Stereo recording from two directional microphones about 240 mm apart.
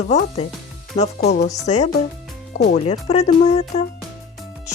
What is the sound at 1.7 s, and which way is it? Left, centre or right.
Speech, left.